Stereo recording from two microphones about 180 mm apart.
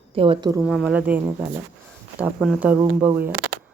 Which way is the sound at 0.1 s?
30° right (ahead or behind).